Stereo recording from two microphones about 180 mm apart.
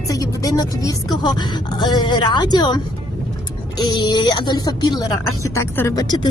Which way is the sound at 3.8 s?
25° left (ahead or behind).